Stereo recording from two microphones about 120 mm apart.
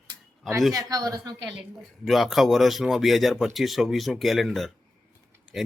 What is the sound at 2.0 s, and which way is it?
Speech, centre (ahead or behind).